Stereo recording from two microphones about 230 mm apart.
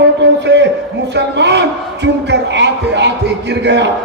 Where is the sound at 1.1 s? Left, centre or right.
Right.